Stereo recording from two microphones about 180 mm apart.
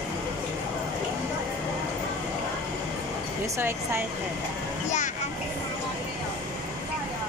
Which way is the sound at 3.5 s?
15° right (ahead or behind).